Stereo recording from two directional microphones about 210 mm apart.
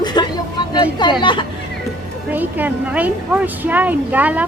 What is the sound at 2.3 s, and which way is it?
Speech, 10° right (ahead or behind).